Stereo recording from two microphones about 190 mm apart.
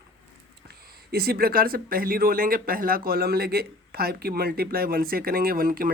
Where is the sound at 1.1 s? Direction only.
55° right (ahead or behind).